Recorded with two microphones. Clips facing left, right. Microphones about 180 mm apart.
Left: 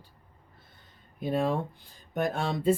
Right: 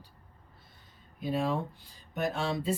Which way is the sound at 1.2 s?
55° left (ahead or behind).